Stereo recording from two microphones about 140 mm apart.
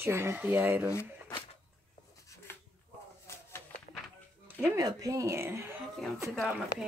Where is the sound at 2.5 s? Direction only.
15° left (ahead or behind).